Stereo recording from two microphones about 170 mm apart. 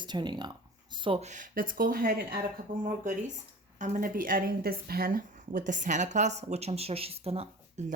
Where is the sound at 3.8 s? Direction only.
50° right (ahead or behind).